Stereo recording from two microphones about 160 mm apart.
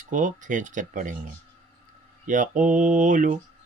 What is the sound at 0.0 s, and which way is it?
Speech, 55° right (ahead or behind).